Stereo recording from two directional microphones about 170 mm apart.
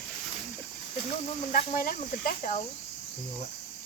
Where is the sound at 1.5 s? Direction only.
50° left (ahead or behind).